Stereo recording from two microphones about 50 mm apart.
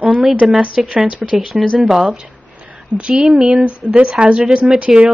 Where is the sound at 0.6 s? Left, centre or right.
Centre.